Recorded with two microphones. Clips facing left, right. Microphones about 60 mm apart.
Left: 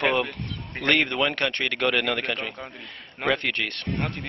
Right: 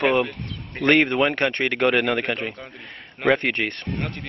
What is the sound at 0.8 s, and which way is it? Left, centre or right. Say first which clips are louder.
A man's voice: right 5 dB; centre.